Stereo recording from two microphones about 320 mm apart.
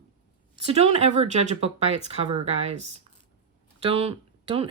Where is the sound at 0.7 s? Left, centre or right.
Centre.